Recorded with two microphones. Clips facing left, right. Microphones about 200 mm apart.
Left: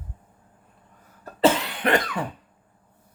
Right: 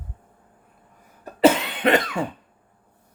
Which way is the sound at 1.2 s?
20° right (ahead or behind).